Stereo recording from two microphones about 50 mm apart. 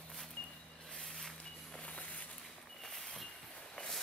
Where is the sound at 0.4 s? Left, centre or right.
Left.